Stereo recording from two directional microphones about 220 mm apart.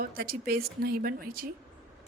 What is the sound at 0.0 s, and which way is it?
Speech, 45° right (ahead or behind).